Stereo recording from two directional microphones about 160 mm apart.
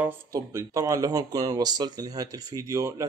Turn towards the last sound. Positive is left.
turn(degrees=-20)  # may be behind; listen again after turning